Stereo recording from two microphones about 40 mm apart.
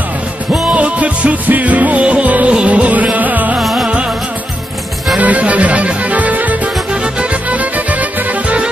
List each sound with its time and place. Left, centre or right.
0.7 s music: right
5.2 s music: right
7.5 s music: right